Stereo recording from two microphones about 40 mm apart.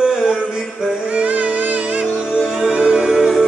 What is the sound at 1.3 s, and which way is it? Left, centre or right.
Music, right.